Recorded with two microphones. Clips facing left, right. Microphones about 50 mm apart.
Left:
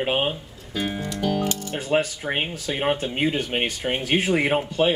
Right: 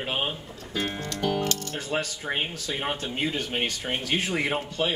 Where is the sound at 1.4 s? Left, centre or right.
Centre.